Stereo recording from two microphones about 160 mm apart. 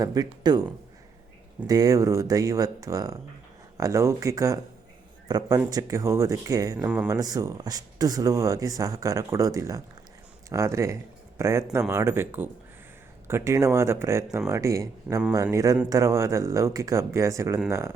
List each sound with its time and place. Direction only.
0.0 s speech: 25° right (ahead or behind)
1.6 s speech: 25° right (ahead or behind)
6.7 s speech: 10° right (ahead or behind)
7.1 s speech: 20° right (ahead or behind)